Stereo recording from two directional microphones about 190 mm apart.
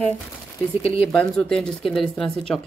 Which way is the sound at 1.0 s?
Centre (ahead or behind).